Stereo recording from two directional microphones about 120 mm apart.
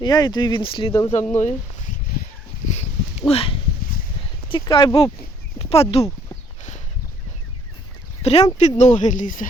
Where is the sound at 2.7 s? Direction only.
60° left (ahead or behind).